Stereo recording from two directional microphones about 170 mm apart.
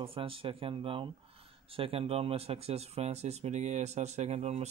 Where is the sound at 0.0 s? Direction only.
30° right (ahead or behind).